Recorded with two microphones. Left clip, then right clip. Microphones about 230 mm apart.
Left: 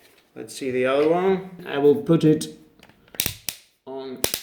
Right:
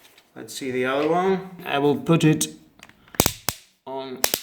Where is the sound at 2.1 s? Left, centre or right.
Right.